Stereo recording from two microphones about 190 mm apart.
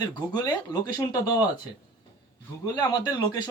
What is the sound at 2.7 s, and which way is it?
Speech, 25° left (ahead or behind).